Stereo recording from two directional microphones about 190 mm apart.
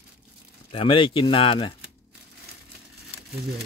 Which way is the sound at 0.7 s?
25° left (ahead or behind).